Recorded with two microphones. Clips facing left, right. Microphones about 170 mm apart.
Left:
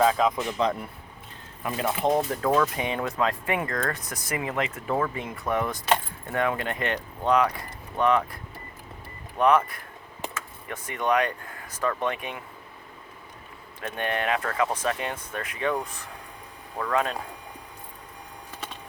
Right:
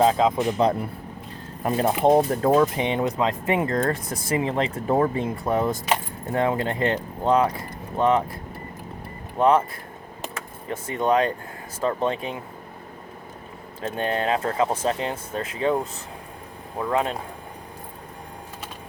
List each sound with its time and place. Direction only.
0.0 s speech: 25° right (ahead or behind)
9.4 s speech: 25° right (ahead or behind)
10.7 s speech: 25° right (ahead or behind)
13.8 s speech: 30° right (ahead or behind)